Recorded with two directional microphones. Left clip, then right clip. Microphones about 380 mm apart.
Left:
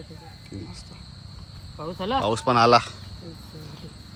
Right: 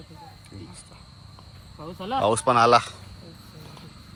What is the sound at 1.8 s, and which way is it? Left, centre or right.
Speech, centre.